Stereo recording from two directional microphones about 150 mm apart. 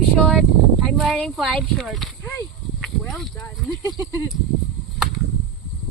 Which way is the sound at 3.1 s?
Centre (ahead or behind).